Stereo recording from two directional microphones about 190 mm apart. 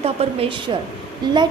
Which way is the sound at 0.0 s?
30° right (ahead or behind).